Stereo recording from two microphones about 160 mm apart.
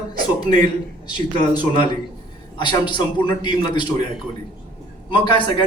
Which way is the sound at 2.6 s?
30° left (ahead or behind).